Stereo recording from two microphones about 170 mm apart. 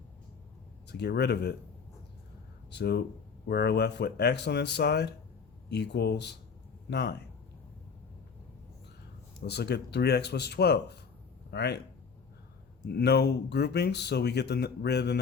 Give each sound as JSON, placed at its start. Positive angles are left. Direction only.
{"t": 0.9, "sound": "speech", "side_deg": 80}
{"t": 2.6, "sound": "speech", "side_deg": 80}
{"t": 9.5, "sound": "speech", "side_deg": 75}
{"t": 12.9, "sound": "speech", "side_deg": 75}